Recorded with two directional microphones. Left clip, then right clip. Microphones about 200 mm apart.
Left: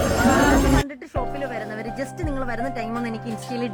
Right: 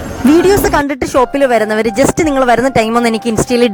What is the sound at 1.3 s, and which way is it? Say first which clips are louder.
Speech: right 18 dB; 50° right (ahead or behind).